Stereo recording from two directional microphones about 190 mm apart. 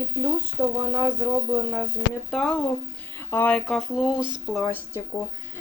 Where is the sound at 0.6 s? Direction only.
20° right (ahead or behind).